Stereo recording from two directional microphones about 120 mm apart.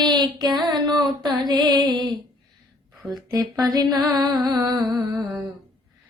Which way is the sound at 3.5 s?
35° right (ahead or behind).